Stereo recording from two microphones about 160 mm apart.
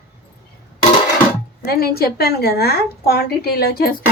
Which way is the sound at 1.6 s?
70° left (ahead or behind).